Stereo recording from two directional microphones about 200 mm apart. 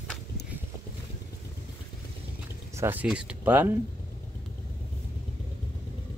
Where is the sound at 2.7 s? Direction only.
10° right (ahead or behind).